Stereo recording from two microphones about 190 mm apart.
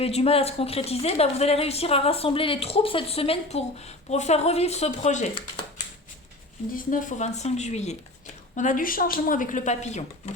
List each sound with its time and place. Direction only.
0.0 s a woman's voice: 30° left (ahead or behind)
6.7 s a woman's voice: 45° left (ahead or behind)